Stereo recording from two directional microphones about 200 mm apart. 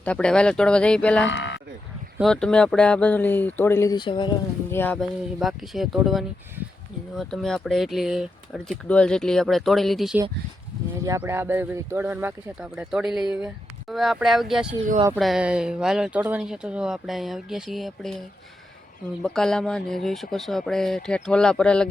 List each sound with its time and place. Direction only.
0.0 s speech: 5° left (ahead or behind)
1.3 s a sound: 65° left (ahead or behind)
2.1 s speech: 5° left (ahead or behind); by 4.4 s 25° left (ahead or behind)
4.7 s speech: 10° left (ahead or behind)
5.4 s speech: centre (ahead or behind)
11.0 s speech: 15° right (ahead or behind); by 18.2 s centre (ahead or behind)
19.2 s speech: 5° left (ahead or behind)